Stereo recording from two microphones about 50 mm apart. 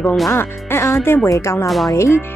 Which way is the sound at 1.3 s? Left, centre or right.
Left.